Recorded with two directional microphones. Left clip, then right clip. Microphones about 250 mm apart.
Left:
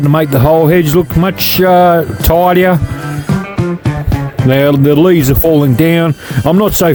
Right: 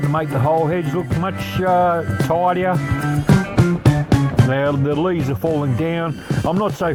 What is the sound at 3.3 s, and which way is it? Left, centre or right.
Music, centre.